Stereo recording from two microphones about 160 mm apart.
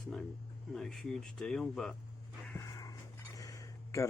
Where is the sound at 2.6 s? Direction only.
20° left (ahead or behind).